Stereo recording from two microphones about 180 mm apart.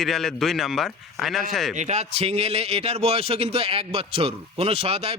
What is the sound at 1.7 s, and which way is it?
A man's voice, 40° right (ahead or behind).